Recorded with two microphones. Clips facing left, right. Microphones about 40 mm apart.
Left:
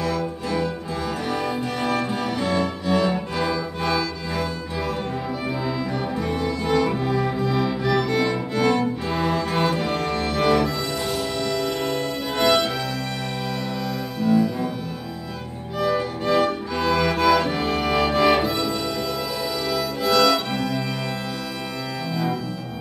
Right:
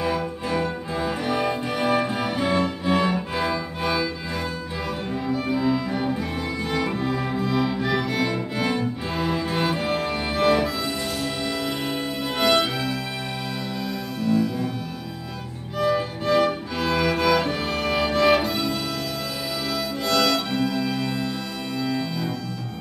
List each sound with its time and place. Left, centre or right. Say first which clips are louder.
0.0 s music: even; centre
14.2 s music: left 3 dB; centre
15.8 s music: even; centre
19.7 s music: left 3 dB; centre